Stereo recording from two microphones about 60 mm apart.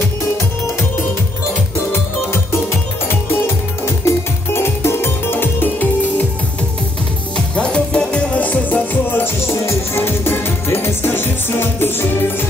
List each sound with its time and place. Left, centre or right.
1.9 s music: left
7.3 s music: centre; by 12.4 s left